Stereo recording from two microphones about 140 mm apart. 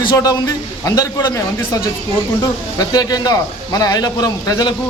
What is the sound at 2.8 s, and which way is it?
A man's voice, 25° left (ahead or behind).